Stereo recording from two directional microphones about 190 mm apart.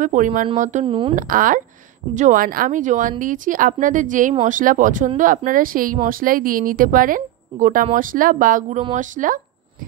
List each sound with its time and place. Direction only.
0.0 s speech: 40° right (ahead or behind)
0.8 s speech: 25° right (ahead or behind)
1.1 s speech: 45° right (ahead or behind)